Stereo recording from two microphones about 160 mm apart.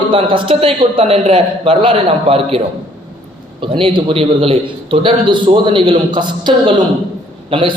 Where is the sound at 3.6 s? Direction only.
30° right (ahead or behind).